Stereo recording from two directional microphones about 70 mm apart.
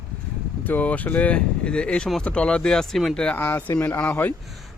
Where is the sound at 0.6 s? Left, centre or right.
Left; by 3.2 s centre.